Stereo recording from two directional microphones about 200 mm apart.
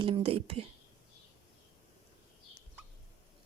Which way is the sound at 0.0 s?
30° right (ahead or behind).